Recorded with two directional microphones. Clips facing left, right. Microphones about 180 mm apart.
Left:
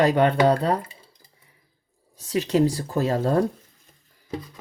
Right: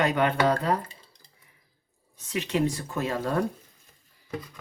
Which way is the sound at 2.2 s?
35° left (ahead or behind).